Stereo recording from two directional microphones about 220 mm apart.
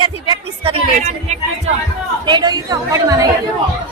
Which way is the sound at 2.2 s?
20° right (ahead or behind).